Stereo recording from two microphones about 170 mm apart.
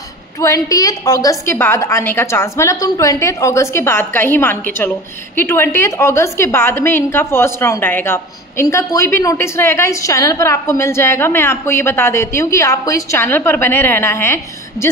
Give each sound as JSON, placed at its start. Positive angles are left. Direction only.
{"t": 0.7, "sound": "a woman's voice", "side_deg": 20}